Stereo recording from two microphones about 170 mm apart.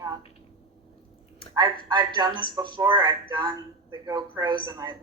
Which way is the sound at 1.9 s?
25° right (ahead or behind).